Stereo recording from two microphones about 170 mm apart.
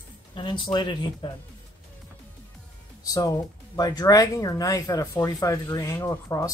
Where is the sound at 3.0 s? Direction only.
20° left (ahead or behind).